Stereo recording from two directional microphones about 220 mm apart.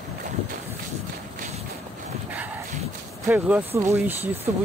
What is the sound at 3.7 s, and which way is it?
Speech, 10° right (ahead or behind).